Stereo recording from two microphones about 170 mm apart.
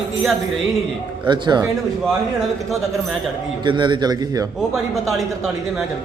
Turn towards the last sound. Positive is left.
turn(degrees=0)  # may be behind; listen again after turning